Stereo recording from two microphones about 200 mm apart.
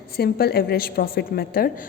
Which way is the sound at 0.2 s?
50° left (ahead or behind).